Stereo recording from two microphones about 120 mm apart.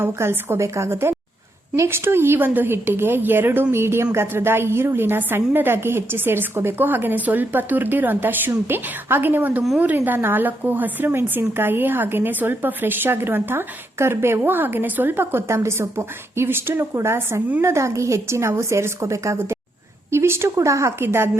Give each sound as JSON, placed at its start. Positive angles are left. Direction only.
{"t": 0.0, "sound": "a woman's voice", "side_deg": -20}